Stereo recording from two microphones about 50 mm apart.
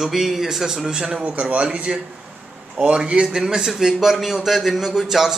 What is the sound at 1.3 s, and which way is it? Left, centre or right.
Speech, right.